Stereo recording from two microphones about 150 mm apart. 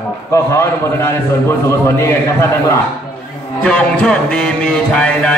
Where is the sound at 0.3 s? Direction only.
20° left (ahead or behind).